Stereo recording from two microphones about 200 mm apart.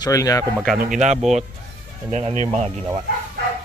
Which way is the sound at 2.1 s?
35° right (ahead or behind).